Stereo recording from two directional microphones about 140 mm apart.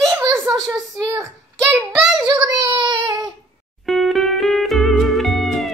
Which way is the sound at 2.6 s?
35° right (ahead or behind).